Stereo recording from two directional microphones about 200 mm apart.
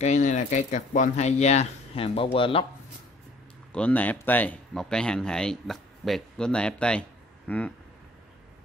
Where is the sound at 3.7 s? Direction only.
5° left (ahead or behind).